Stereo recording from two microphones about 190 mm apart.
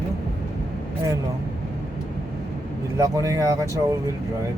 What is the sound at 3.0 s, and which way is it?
Speech, 15° right (ahead or behind).